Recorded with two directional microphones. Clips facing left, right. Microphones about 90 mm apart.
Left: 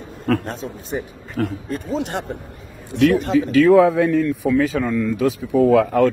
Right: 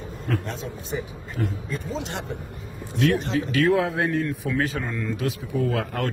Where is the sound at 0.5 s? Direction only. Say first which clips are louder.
Left 4 dB; 45° left (ahead or behind).